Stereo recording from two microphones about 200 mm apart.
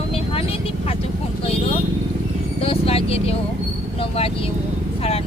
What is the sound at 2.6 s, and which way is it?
Vehicle, 30° left (ahead or behind).